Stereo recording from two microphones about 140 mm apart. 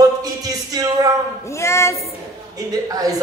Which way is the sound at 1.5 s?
20° left (ahead or behind).